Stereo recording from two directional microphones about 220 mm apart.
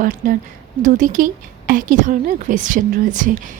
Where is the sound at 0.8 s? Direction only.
35° right (ahead or behind).